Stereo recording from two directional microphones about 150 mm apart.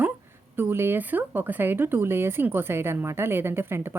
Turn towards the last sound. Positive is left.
turn(degrees=-15)  # may be behind; listen again after turning